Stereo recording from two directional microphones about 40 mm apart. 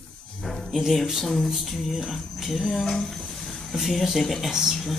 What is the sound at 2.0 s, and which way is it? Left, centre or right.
Speech, centre.